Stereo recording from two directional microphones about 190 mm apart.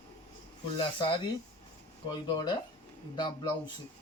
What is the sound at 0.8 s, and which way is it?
A man's voice, 25° left (ahead or behind).